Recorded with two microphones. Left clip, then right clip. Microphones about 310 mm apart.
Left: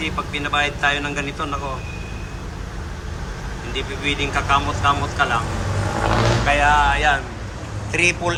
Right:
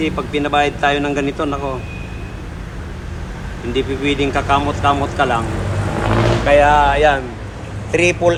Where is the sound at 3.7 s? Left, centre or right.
Centre.